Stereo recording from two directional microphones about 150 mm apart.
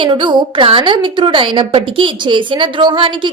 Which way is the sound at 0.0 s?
35° right (ahead or behind).